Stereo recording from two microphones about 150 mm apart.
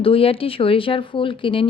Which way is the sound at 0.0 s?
40° left (ahead or behind).